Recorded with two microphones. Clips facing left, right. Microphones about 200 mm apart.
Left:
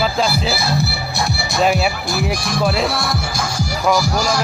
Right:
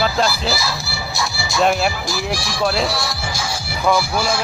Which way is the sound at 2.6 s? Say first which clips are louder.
Left 1 dB; centre (ahead or behind).